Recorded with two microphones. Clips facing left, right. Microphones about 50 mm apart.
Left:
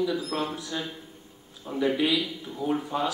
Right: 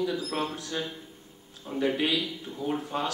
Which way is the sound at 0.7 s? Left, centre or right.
Centre.